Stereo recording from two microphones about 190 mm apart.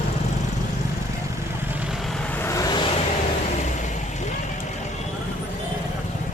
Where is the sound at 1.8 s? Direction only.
Centre (ahead or behind); by 2.9 s 20° left (ahead or behind).